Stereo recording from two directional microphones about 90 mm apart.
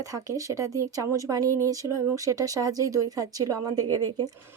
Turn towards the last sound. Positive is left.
turn(degrees=-50)  # may be behind; listen again after turning